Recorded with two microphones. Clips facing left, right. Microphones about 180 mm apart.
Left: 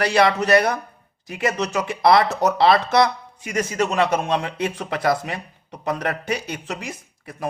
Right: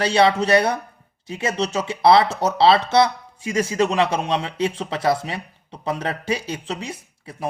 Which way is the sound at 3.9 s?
50° left (ahead or behind).